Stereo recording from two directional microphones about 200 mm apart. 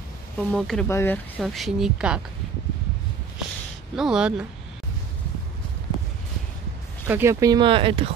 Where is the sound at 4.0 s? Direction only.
5° right (ahead or behind).